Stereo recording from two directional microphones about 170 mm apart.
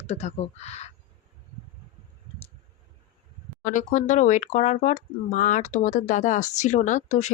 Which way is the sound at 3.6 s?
45° left (ahead or behind).